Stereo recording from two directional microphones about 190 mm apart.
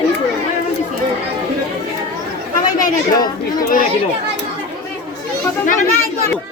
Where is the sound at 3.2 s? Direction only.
45° left (ahead or behind).